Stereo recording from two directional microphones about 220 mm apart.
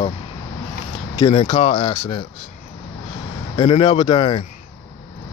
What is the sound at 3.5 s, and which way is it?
Speech, 25° left (ahead or behind).